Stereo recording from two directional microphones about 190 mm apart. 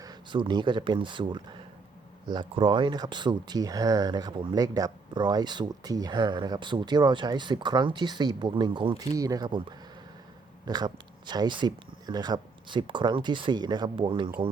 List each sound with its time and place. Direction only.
0.0 s speech: 25° right (ahead or behind)